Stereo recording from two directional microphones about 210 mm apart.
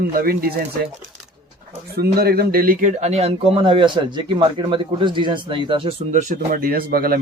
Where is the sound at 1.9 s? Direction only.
50° right (ahead or behind); by 6.2 s 25° right (ahead or behind).